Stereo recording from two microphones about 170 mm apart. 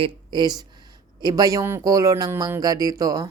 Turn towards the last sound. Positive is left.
turn(degrees=-20)  # may be behind; listen again after turning